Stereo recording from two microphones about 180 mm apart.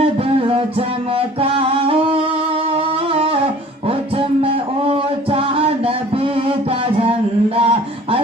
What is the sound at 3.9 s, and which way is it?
Music, 30° right (ahead or behind).